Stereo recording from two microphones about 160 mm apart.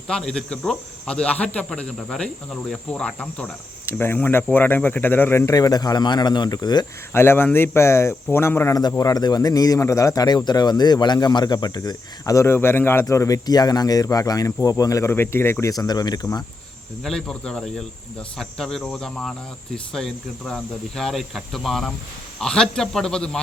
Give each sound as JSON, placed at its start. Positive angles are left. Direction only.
{"t": 0.1, "sound": "speech", "side_deg": 5}
{"t": 7.1, "sound": "speech", "side_deg": 15}
{"t": 17.0, "sound": "speech", "side_deg": 5}